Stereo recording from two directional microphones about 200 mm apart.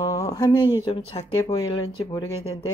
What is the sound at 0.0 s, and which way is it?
Speech, 15° left (ahead or behind).